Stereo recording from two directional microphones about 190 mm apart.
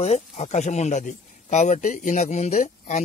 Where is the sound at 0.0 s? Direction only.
35° left (ahead or behind).